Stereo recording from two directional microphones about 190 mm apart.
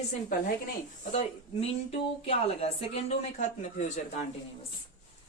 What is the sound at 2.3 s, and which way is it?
Speech, 30° left (ahead or behind).